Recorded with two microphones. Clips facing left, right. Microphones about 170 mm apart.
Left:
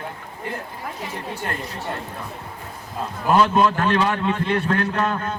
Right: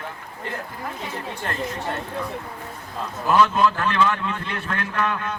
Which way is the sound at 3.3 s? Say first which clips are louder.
Left 1 dB; 40° left (ahead or behind).